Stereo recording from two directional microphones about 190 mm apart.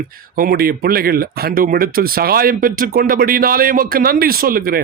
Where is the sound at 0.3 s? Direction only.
50° right (ahead or behind).